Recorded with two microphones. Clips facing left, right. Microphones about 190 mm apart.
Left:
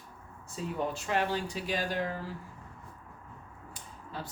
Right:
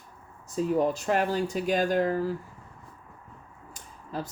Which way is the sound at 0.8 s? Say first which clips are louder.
Right 2 dB; 40° right (ahead or behind).